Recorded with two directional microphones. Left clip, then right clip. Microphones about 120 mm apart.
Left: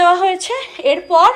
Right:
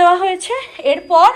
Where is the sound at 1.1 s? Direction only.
15° left (ahead or behind).